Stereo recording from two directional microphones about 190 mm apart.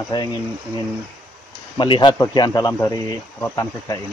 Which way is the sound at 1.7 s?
25° left (ahead or behind).